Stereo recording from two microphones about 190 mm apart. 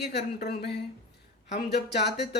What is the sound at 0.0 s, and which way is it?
Speech, 60° left (ahead or behind).